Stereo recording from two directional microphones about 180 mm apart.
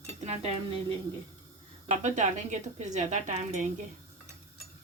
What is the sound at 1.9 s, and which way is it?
A woman's voice, 40° right (ahead or behind).